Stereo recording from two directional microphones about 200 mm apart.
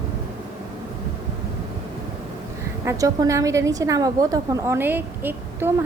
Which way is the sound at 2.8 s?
15° right (ahead or behind).